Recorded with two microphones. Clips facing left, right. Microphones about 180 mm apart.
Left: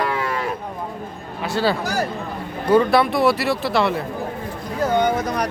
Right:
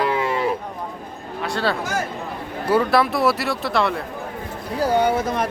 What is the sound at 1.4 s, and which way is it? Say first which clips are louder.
Speech: left 2 dB; centre (ahead or behind).